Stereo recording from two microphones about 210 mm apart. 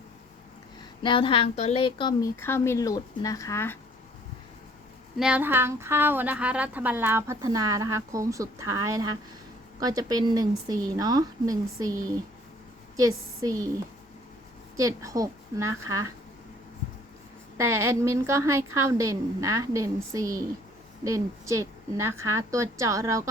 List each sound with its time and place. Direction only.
1.0 s speech: 25° left (ahead or behind)
5.1 s a woman's voice: 5° right (ahead or behind)
14.8 s a woman's voice: 15° right (ahead or behind)
17.6 s a woman's voice: 10° right (ahead or behind)